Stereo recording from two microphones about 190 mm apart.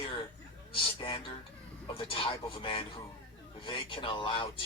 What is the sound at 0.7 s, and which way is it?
A man's voice, 25° left (ahead or behind).